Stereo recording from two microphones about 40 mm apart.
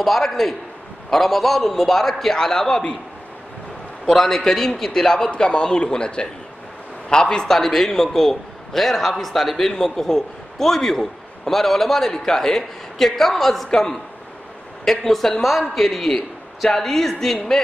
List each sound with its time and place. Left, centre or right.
0.0 s a man's voice: centre
4.1 s a man's voice: centre
5.3 s a man's voice: left
7.5 s a man's voice: centre